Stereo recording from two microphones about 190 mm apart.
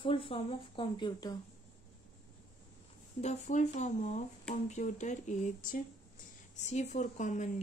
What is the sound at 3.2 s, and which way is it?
Speech, 40° left (ahead or behind).